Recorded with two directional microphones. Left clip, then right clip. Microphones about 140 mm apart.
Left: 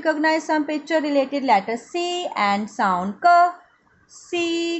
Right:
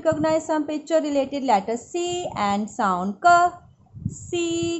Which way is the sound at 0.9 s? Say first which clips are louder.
Left 1 dB; 25° right (ahead or behind).